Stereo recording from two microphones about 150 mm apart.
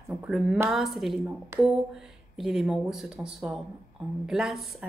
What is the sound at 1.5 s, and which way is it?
Speech, 15° right (ahead or behind).